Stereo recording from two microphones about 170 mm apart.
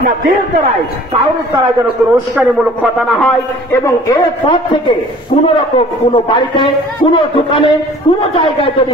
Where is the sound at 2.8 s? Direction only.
Centre (ahead or behind).